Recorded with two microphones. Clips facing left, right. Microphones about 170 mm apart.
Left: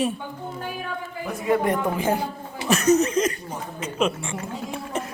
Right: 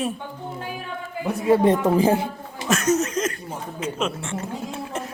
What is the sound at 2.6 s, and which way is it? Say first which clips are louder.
Chuckle: left 2 dB; 5° left (ahead or behind).